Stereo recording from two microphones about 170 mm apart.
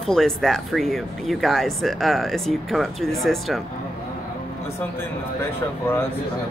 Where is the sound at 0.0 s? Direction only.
Centre (ahead or behind).